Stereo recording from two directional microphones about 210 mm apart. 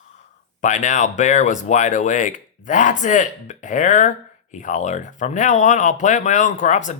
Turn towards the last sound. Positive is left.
turn(degrees=35)  # may be behind; listen again after turning